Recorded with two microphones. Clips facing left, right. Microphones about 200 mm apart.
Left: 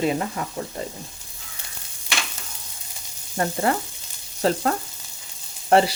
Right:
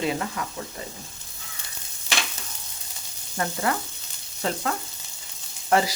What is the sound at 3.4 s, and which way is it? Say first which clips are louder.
Speech: left 4 dB; 30° left (ahead or behind).